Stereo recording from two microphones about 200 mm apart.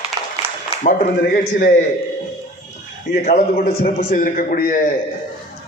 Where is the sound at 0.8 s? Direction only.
40° left (ahead or behind).